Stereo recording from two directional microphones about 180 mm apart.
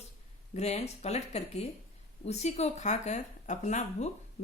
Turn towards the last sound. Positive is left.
turn(degrees=40)  # may be behind; listen again after turning